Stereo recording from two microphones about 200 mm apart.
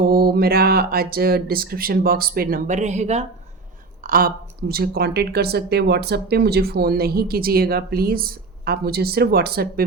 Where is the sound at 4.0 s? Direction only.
45° right (ahead or behind).